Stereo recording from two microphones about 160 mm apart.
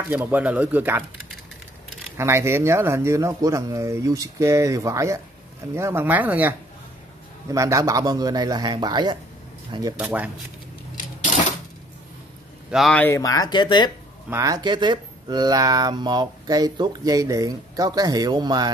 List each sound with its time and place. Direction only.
0.1 s speech: 10° right (ahead or behind)
2.1 s speech: 15° right (ahead or behind)
7.5 s speech: 20° right (ahead or behind)
9.9 s speech: 10° right (ahead or behind)
12.7 s speech: centre (ahead or behind)
13.0 s speech: 20° left (ahead or behind)
14.3 s speech: 20° right (ahead or behind)